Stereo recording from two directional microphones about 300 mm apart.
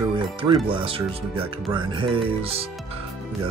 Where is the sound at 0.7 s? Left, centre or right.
Centre.